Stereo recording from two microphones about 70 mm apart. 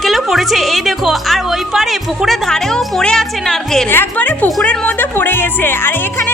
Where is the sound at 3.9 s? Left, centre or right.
Left.